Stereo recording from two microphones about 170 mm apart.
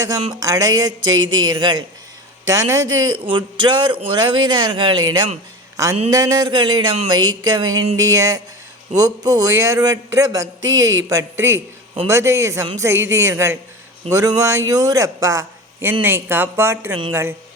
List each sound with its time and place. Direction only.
0.3 s a man's voice: 20° right (ahead or behind)